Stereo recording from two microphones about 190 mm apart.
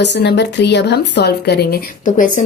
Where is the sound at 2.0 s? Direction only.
40° left (ahead or behind).